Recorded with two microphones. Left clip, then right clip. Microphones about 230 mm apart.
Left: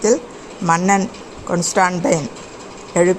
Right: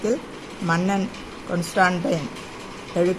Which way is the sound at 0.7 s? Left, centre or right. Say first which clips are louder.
Left 8 dB; left.